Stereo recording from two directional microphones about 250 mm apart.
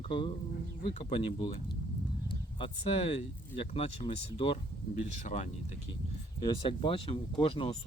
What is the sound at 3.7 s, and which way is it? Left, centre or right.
Speech, left.